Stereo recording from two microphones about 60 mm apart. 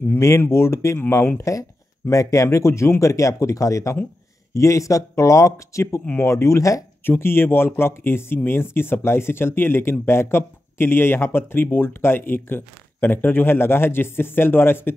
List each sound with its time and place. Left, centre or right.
0.4 s speech: left
1.4 s speech: left
7.1 s speech: left